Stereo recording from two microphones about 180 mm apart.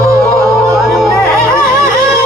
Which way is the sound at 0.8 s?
Centre (ahead or behind).